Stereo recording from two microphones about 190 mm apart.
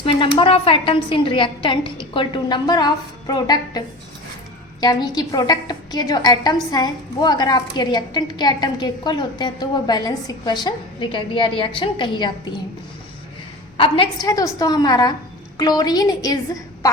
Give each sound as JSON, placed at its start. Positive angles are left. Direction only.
{"t": 0.0, "sound": "a woman's voice", "side_deg": 30}
{"t": 13.7, "sound": "a woman's voice", "side_deg": 30}